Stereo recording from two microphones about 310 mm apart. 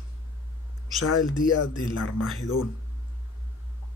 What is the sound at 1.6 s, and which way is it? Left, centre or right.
Speech, left.